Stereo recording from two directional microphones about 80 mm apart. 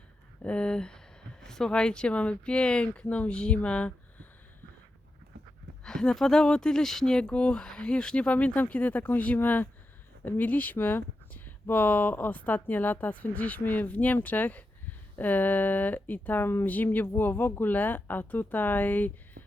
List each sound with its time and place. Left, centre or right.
0.4 s speech: centre
5.8 s speech: centre